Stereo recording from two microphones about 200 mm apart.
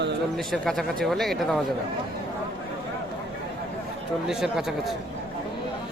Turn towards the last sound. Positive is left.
turn(degrees=0)  # may be behind; listen again after turning